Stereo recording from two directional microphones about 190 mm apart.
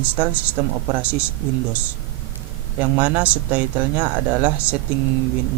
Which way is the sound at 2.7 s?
10° right (ahead or behind).